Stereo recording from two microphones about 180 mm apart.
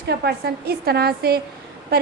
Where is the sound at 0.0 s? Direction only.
65° right (ahead or behind).